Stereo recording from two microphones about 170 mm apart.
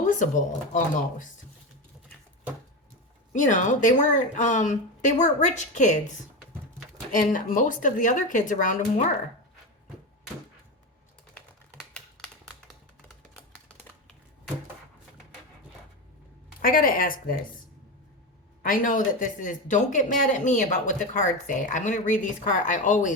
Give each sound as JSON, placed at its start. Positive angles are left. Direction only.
{"t": 0.0, "sound": "speech", "side_deg": 50}
{"t": 3.3, "sound": "speech", "side_deg": 45}
{"t": 16.6, "sound": "speech", "side_deg": 55}
{"t": 18.6, "sound": "speech", "side_deg": 55}